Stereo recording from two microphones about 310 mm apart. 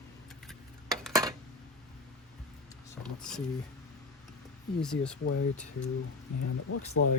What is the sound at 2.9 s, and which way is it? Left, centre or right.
Speech, centre.